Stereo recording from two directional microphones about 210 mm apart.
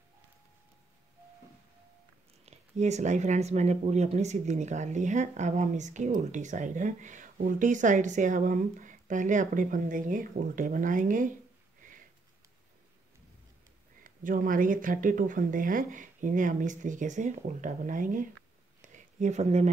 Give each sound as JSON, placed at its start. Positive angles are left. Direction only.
{"t": 2.4, "sound": "speech", "side_deg": -30}
{"t": 14.0, "sound": "speech", "side_deg": -40}
{"t": 18.8, "sound": "a sound", "side_deg": -35}